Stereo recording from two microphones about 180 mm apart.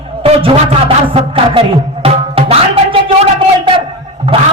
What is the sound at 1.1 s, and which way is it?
Music, 30° right (ahead or behind).